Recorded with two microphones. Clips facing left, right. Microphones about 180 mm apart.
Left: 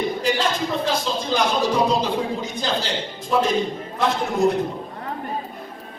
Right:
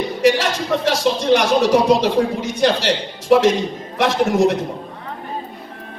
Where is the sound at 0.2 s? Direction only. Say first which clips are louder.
Right 6 dB; 75° right (ahead or behind).